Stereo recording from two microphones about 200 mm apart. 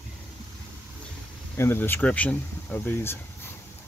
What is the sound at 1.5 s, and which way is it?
Speech, 10° left (ahead or behind).